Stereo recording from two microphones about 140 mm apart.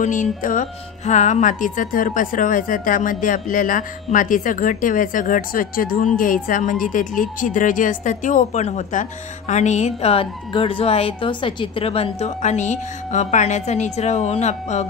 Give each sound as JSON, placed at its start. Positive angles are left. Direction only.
{"t": 0.0, "sound": "a woman's voice", "side_deg": 65}